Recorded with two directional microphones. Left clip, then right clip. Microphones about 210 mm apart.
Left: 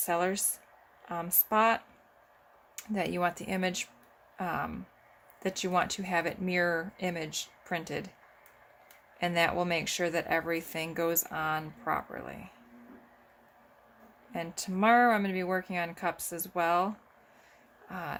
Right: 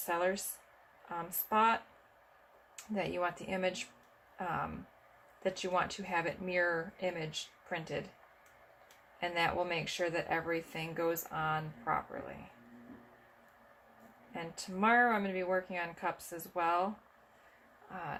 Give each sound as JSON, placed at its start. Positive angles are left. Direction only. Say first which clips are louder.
{"t": 0.0, "sound": "speech", "louder": "left 4 dB", "side_deg": 55}
{"t": 9.2, "sound": "speech", "louder": "left 5 dB", "side_deg": 55}
{"t": 14.3, "sound": "speech", "louder": "left 6 dB", "side_deg": 55}